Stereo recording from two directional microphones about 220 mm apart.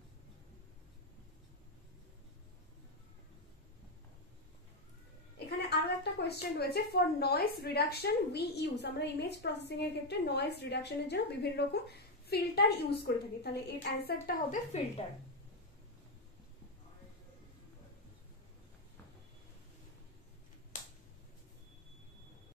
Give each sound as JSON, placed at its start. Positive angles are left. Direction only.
{"t": 5.7, "sound": "a woman's voice", "side_deg": 50}
{"t": 20.7, "sound": "finger snapping", "side_deg": 35}